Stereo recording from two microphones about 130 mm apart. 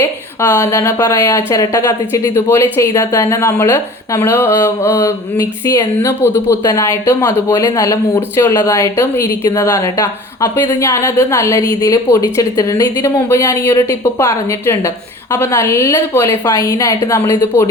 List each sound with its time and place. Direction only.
0.0 s speech: 20° left (ahead or behind)